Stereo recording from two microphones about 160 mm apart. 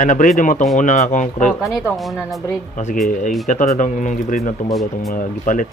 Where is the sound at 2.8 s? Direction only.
55° left (ahead or behind).